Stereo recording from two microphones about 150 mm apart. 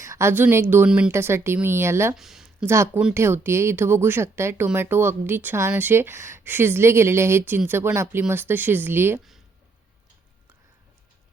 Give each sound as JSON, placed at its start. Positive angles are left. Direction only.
{"t": 0.0, "sound": "speech", "side_deg": -20}
{"t": 2.1, "sound": "a sound", "side_deg": 0}
{"t": 2.6, "sound": "speech", "side_deg": -15}